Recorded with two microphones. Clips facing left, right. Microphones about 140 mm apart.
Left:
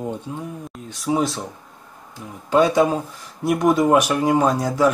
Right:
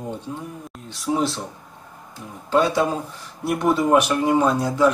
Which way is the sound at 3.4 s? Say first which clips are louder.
Left 3 dB; 10° left (ahead or behind).